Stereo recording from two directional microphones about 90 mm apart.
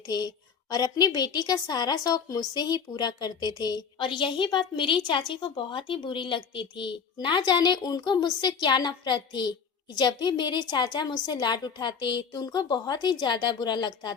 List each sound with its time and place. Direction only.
0.1 s a woman's voice: 50° left (ahead or behind)